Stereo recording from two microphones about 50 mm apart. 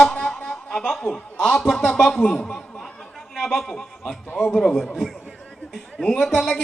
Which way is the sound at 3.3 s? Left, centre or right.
Centre.